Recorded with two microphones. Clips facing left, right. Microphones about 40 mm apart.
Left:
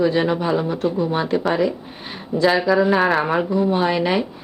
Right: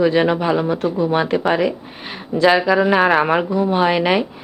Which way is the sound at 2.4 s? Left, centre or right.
Centre.